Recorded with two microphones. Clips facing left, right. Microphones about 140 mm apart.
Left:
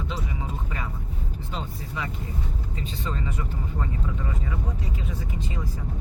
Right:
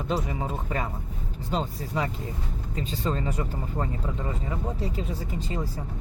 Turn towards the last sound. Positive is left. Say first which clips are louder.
# right 3 dB
turn(degrees=-30)  # may be behind; listen again after turning